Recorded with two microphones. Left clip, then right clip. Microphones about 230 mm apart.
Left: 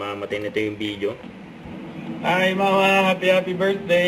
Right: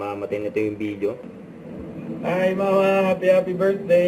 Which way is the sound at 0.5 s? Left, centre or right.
Centre.